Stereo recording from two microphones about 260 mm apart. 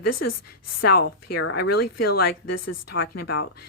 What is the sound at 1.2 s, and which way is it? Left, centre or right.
A woman's voice, left.